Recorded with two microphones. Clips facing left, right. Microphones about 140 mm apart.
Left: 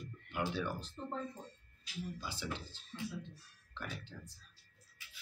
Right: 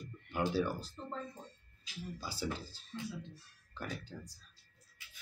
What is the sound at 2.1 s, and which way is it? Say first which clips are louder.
Speech: right 3 dB; 35° right (ahead or behind).